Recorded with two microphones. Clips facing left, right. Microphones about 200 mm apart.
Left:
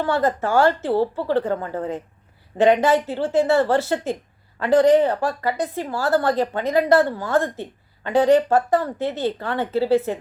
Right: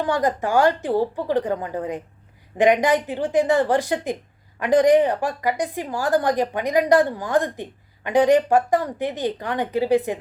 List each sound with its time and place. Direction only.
0.0 s a woman's voice: 15° right (ahead or behind)